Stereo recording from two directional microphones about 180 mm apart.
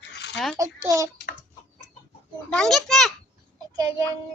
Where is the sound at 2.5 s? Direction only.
5° left (ahead or behind).